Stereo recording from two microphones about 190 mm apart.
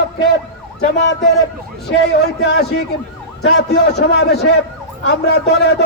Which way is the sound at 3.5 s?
60° left (ahead or behind).